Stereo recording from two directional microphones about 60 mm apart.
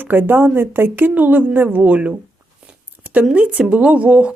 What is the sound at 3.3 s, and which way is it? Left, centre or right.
A woman's voice, right.